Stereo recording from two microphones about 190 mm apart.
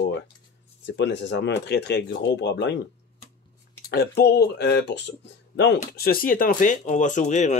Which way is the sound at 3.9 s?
55° left (ahead or behind).